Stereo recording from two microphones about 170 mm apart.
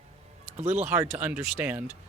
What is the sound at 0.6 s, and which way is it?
Speech, 40° right (ahead or behind).